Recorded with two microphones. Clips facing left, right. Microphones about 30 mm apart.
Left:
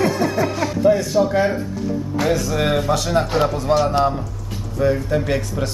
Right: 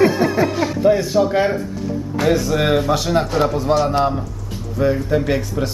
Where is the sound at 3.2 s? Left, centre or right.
Left.